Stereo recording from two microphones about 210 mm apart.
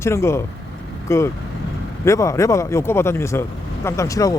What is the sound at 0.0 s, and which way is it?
Speech, 10° left (ahead or behind).